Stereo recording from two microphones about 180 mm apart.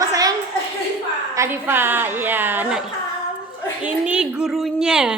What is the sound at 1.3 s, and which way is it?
A woman's voice, 15° right (ahead or behind).